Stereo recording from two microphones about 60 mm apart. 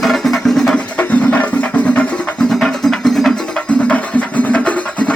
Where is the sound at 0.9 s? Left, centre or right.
Left.